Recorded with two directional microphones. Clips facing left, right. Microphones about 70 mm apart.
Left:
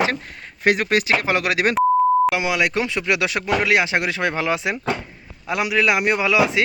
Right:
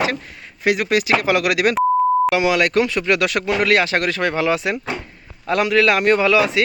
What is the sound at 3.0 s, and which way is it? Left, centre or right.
Speech, centre.